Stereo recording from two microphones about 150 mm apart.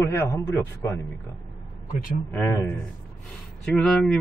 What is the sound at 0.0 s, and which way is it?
Speech, 20° left (ahead or behind).